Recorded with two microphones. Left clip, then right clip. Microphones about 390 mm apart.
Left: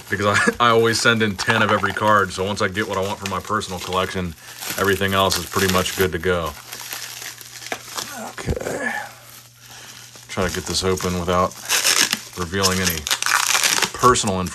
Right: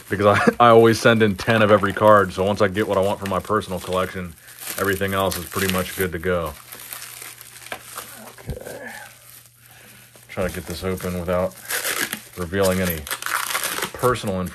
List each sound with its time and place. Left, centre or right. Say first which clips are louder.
0.1 s speech: right 1 dB; centre
8.4 s dog: left 9 dB; left
10.3 s speech: left 4 dB; centre
11.8 s a sound: left 7 dB; centre
12.4 s speech: right 1 dB; centre
12.9 s crumpling: left 6 dB; centre
13.9 s speech: left 3 dB; centre